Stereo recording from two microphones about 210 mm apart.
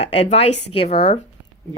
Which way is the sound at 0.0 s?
30° left (ahead or behind).